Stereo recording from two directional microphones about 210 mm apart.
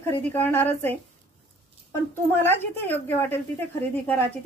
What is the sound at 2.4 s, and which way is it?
A woman's voice, 10° left (ahead or behind).